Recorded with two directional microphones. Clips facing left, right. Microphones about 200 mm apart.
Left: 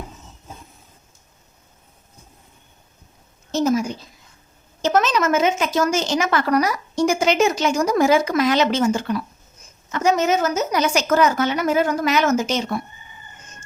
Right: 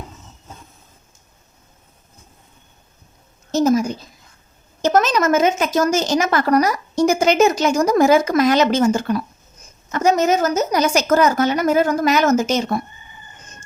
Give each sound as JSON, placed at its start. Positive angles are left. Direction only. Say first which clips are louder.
{"t": 3.5, "sound": "a woman's voice", "louder": "right 3 dB", "side_deg": -40}